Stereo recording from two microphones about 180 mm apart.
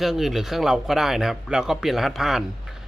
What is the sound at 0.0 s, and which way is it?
A man's voice, centre (ahead or behind).